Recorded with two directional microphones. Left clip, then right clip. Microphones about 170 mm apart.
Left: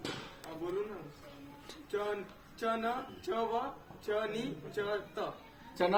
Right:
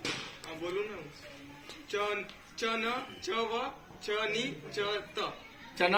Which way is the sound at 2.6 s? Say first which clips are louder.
Right 2 dB; 40° left (ahead or behind).